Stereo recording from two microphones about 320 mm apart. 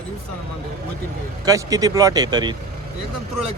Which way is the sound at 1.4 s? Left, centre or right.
Centre.